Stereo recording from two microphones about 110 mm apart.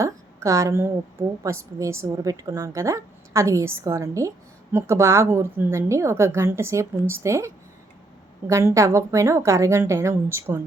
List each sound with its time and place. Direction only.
0.0 s a woman's voice: 30° right (ahead or behind)